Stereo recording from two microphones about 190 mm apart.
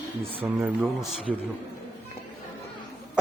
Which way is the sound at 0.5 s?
Centre (ahead or behind).